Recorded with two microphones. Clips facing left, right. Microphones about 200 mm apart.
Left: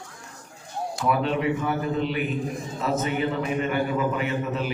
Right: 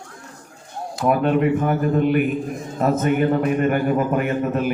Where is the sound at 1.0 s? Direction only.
50° right (ahead or behind).